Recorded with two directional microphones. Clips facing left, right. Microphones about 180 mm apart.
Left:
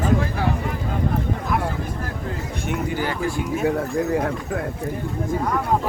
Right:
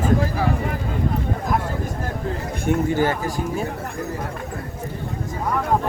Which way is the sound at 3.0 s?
45° right (ahead or behind).